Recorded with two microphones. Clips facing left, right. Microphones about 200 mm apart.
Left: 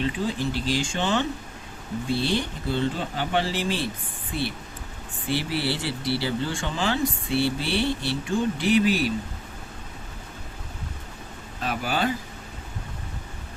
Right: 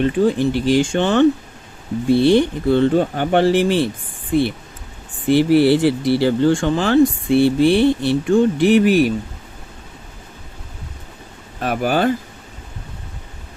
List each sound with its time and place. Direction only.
0.0 s speech: 55° right (ahead or behind)
5.3 s speech: 55° right (ahead or behind)
11.6 s speech: 55° right (ahead or behind)